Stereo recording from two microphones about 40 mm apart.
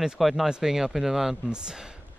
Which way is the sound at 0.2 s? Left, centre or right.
Centre.